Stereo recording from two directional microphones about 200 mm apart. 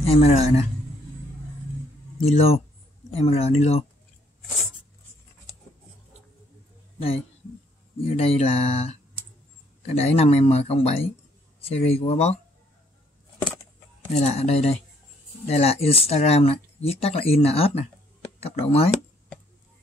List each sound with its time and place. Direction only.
0.0 s speech: 30° left (ahead or behind)
2.2 s speech: 30° left (ahead or behind)
8.0 s speech: 30° left (ahead or behind)
14.1 s speech: 35° left (ahead or behind)